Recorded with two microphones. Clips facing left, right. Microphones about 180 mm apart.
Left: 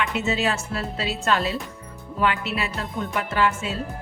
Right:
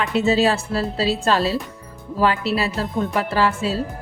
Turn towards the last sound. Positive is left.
turn(degrees=-35)  # may be behind; listen again after turning